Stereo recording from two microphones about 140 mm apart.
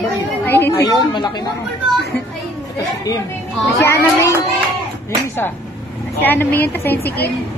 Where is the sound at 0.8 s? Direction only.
30° left (ahead or behind).